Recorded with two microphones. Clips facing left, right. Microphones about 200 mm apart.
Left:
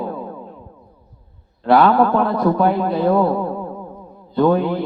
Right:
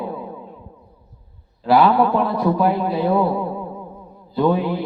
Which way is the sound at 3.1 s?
50° left (ahead or behind).